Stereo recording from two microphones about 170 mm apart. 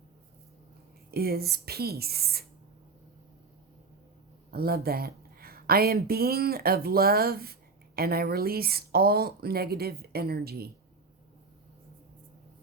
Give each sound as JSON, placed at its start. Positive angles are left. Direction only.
{"t": 1.1, "sound": "speech", "side_deg": -65}
{"t": 4.5, "sound": "speech", "side_deg": -65}